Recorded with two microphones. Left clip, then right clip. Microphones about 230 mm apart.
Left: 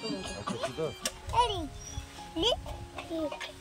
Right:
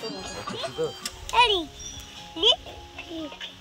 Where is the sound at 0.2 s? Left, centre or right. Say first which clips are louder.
Right 3 dB; left.